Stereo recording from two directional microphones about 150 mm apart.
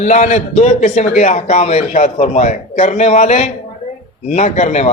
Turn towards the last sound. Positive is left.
turn(degrees=50)  # may be behind; listen again after turning